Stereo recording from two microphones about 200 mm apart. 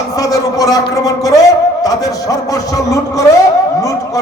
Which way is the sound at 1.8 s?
15° left (ahead or behind).